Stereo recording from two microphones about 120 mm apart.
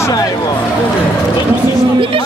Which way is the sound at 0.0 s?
30° left (ahead or behind).